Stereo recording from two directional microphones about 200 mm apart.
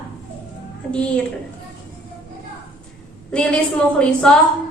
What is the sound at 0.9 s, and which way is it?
Speech, 5° left (ahead or behind).